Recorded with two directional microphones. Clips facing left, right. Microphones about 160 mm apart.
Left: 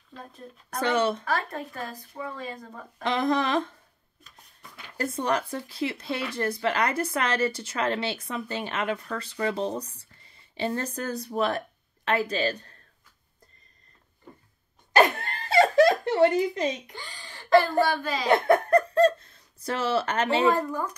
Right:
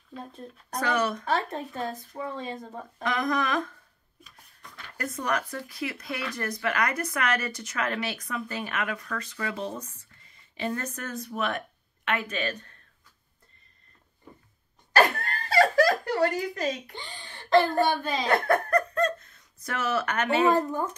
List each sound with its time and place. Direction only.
0.7 s speech: 25° left (ahead or behind)
1.2 s speech: 25° right (ahead or behind)
3.0 s speech: 30° left (ahead or behind)
4.6 s a sound: 10° left (ahead or behind)
4.9 s speech: 30° left (ahead or behind)
14.9 s a sound: 20° left (ahead or behind)
16.9 s speech: 20° right (ahead or behind)
18.2 s giggle: 20° left (ahead or behind)
20.4 s speech: 25° right (ahead or behind)